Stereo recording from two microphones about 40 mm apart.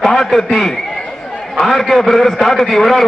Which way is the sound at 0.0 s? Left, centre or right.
Centre.